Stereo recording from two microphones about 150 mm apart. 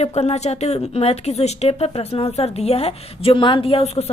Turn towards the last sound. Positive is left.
turn(degrees=45)  # may be behind; listen again after turning